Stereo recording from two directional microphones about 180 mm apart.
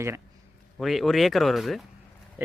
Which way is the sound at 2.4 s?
10° right (ahead or behind).